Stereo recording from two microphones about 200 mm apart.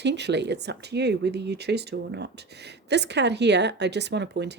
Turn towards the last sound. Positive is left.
turn(degrees=-60)  # may be behind; listen again after turning